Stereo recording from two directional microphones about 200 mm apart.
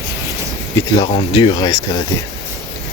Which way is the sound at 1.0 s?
25° left (ahead or behind).